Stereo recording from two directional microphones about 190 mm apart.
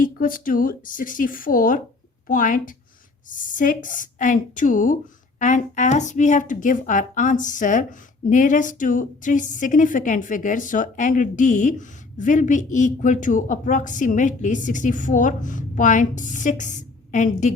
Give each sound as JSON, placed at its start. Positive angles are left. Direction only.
{"t": 0.0, "sound": "speech", "side_deg": 45}